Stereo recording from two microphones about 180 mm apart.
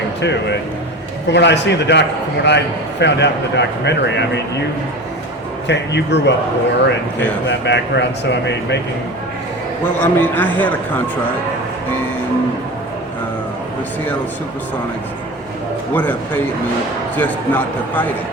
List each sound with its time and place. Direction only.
1.3 s speech: 75° left (ahead or behind)
5.6 s speech: 75° left (ahead or behind)
10.0 s a man's voice: 10° left (ahead or behind)
17.2 s a man's voice: 10° left (ahead or behind)